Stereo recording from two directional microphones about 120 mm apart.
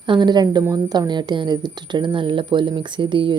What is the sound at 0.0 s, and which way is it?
Speech, 40° right (ahead or behind).